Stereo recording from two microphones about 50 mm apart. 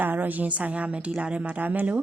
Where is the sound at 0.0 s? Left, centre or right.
Right.